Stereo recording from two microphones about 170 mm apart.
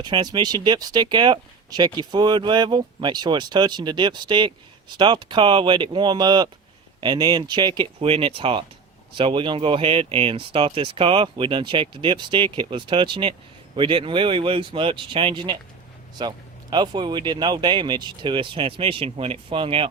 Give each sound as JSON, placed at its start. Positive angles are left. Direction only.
{"t": 0.0, "sound": "speech", "side_deg": -25}